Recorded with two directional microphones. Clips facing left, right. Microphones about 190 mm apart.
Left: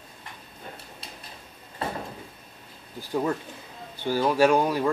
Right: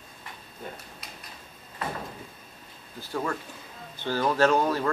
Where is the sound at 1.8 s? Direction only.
30° left (ahead or behind).